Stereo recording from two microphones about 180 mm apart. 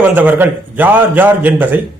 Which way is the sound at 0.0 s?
10° right (ahead or behind).